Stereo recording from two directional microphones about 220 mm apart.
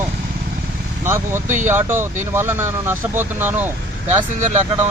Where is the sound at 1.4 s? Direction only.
35° right (ahead or behind).